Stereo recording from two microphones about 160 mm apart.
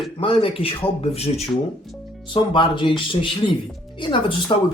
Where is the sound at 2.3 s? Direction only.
30° left (ahead or behind).